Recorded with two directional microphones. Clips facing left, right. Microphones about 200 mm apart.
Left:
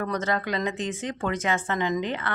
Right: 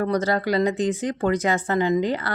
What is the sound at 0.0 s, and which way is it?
Speech, 35° right (ahead or behind).